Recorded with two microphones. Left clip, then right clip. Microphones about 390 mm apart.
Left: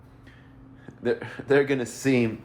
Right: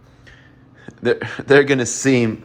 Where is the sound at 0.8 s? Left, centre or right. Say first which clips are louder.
Right 8 dB; right.